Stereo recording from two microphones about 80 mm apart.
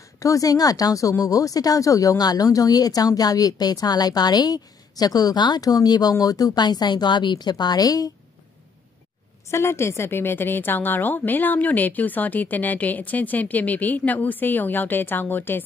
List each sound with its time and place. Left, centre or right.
0.2 s speech: left
9.5 s a woman's voice: left